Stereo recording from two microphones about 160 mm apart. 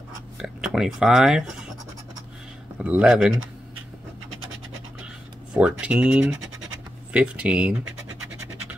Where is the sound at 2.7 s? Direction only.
5° right (ahead or behind).